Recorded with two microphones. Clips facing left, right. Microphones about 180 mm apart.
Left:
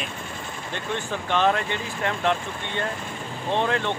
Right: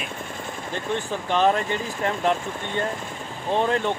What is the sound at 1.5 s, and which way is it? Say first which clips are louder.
Speech: right 2 dB; 35° right (ahead or behind).